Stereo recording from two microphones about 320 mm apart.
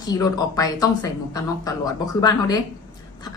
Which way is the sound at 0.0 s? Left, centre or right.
Centre.